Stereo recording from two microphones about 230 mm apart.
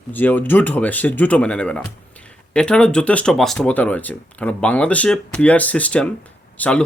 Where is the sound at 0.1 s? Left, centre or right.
Centre.